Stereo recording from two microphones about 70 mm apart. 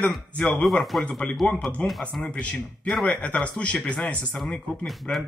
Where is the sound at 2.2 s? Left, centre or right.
Centre.